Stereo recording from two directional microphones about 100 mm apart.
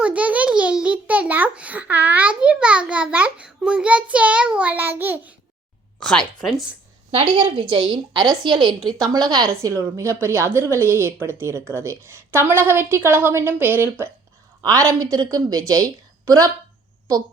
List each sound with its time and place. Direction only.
0.0 s a sound: 15° right (ahead or behind)
6.0 s speech: 5° left (ahead or behind)
7.1 s a woman's voice: 65° right (ahead or behind); by 9.5 s 45° right (ahead or behind)
9.5 s a woman's voice: 30° right (ahead or behind)
14.6 s a woman's voice: 35° right (ahead or behind)